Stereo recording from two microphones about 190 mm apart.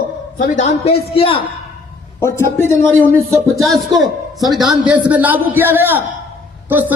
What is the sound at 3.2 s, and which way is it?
Speech, 15° right (ahead or behind).